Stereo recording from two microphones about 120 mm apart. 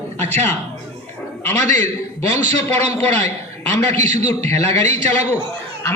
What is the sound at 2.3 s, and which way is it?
A man's voice, 65° right (ahead or behind).